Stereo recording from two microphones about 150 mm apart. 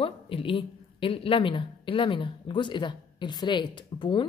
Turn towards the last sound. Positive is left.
turn(degrees=35)  # may be behind; listen again after turning